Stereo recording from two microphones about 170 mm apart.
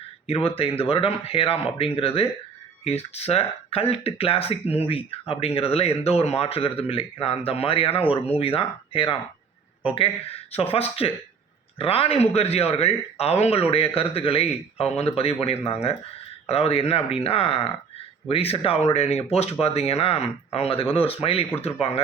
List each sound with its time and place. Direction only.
0.3 s speech: 35° left (ahead or behind)